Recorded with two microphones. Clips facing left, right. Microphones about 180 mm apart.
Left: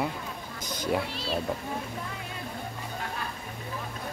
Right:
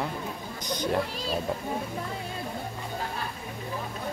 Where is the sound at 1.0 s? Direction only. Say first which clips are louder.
Right 2 dB; 40° right (ahead or behind).